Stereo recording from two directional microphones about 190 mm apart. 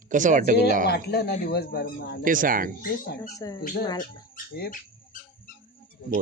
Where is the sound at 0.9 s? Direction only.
55° left (ahead or behind).